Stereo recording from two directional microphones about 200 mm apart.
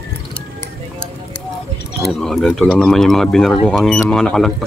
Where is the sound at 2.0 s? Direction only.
Centre (ahead or behind).